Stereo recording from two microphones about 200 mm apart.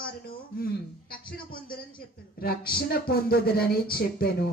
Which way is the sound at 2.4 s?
50° left (ahead or behind).